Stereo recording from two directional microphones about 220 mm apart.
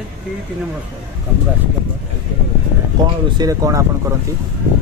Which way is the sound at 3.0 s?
20° right (ahead or behind).